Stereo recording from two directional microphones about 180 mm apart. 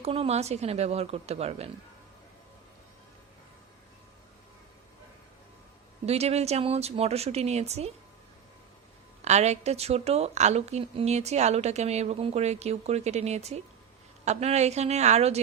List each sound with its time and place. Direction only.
0.0 s a woman's voice: 35° right (ahead or behind)
6.1 s a woman's voice: 35° right (ahead or behind)
9.2 s a woman's voice: 40° right (ahead or behind)